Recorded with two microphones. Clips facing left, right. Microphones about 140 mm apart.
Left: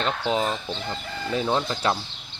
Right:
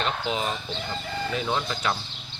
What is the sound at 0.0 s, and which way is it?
Speech, 35° left (ahead or behind).